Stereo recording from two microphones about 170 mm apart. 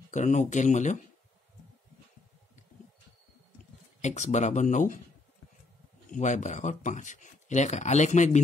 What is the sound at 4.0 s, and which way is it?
Speech, 45° left (ahead or behind).